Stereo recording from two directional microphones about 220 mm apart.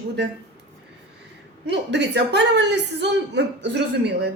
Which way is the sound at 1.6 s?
50° right (ahead or behind).